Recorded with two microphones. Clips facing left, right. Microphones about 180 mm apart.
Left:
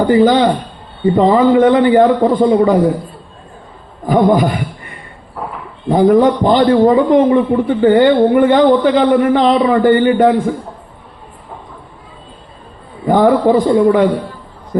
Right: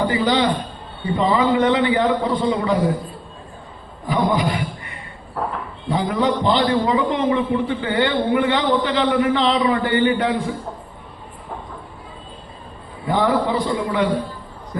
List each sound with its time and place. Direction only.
0.1 s a man's voice: 50° left (ahead or behind)
4.0 s a man's voice: 50° left (ahead or behind)
13.1 s a man's voice: 50° left (ahead or behind)